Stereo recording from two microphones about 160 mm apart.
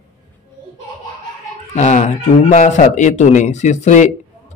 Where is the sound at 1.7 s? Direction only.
50° left (ahead or behind).